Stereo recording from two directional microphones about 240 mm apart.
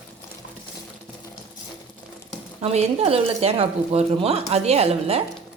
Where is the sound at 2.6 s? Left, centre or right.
Right.